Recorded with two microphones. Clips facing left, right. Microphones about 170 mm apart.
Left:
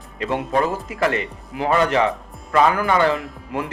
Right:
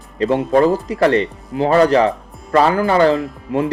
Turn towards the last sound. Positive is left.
turn(degrees=-30)  # may be behind; listen again after turning